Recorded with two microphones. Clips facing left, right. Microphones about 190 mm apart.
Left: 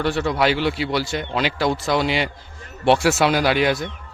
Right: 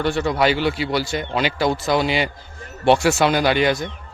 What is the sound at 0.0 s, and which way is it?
A man's voice, centre (ahead or behind).